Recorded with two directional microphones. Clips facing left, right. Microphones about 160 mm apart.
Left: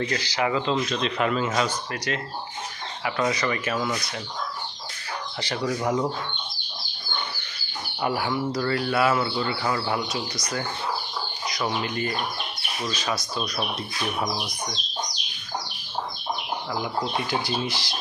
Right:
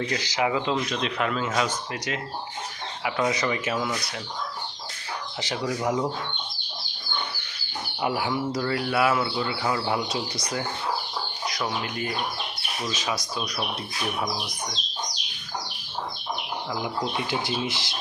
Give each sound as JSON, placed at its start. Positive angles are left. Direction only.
{"t": 0.2, "sound": "a man's voice", "side_deg": -15}
{"t": 1.2, "sound": "speech", "side_deg": 5}
{"t": 1.6, "sound": "a man's voice", "side_deg": -15}
{"t": 5.6, "sound": "speech", "side_deg": -5}
{"t": 8.0, "sound": "a man's voice", "side_deg": -10}
{"t": 10.1, "sound": "speech", "side_deg": -25}
{"t": 11.4, "sound": "speech", "side_deg": 0}
{"t": 12.8, "sound": "a man's voice", "side_deg": -20}
{"t": 16.8, "sound": "speech", "side_deg": -20}